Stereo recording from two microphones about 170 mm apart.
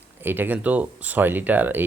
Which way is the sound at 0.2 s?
10° right (ahead or behind).